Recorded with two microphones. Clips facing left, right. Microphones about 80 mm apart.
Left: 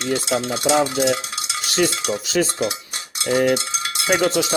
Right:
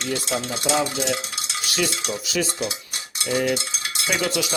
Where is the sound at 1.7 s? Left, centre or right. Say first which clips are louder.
Left 6 dB; left.